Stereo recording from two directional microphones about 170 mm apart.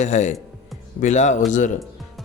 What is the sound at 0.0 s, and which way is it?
A man's voice, 45° left (ahead or behind).